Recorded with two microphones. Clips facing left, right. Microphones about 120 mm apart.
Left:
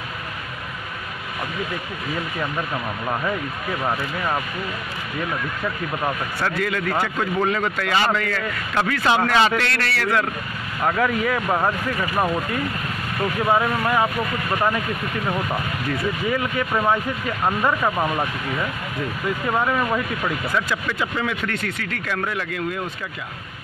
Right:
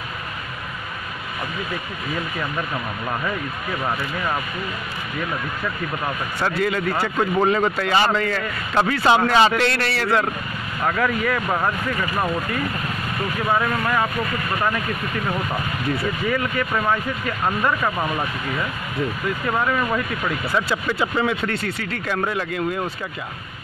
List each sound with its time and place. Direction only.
2.7 s speech: 10° left (ahead or behind)
6.4 s a man's voice: 25° right (ahead or behind)
10.8 s speech: 10° left (ahead or behind)
13.8 s speech: 15° left (ahead or behind)
16.3 s speech: 15° left (ahead or behind)
20.5 s a man's voice: 25° right (ahead or behind)